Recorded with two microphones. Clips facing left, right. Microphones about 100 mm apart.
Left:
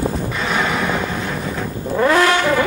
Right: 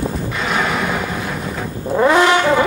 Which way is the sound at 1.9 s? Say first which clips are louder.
Right 2 dB; 15° right (ahead or behind).